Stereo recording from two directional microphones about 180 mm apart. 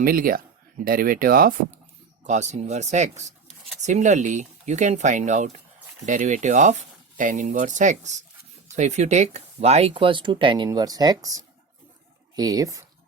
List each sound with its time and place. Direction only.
0.0 s speech: 50° right (ahead or behind)
2.2 s speech: 40° right (ahead or behind); by 12.8 s 20° right (ahead or behind)